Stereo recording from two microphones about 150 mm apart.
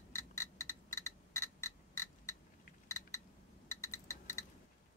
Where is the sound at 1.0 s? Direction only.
20° left (ahead or behind).